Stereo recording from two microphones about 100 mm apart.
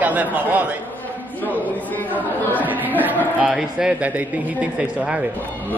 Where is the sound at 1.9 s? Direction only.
15° left (ahead or behind).